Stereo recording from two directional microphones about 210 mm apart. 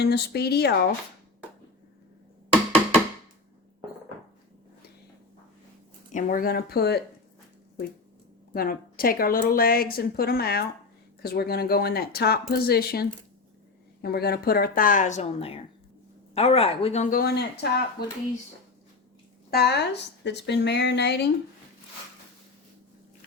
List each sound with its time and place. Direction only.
0.0 s a woman's voice: 50° left (ahead or behind)
6.1 s a woman's voice: 40° left (ahead or behind)
8.5 s a woman's voice: 45° left (ahead or behind)
19.5 s a woman's voice: 50° left (ahead or behind)